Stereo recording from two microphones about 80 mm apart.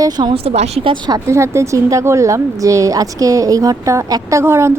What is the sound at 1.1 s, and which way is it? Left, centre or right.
A woman's voice, right.